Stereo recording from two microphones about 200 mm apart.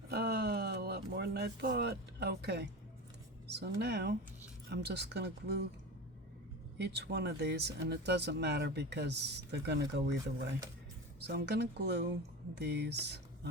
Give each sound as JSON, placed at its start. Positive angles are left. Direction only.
{"t": 0.1, "sound": "a sound", "side_deg": -55}
{"t": 3.4, "sound": "speech", "side_deg": -55}
{"t": 6.7, "sound": "speech", "side_deg": -55}
{"t": 11.2, "sound": "speech", "side_deg": -50}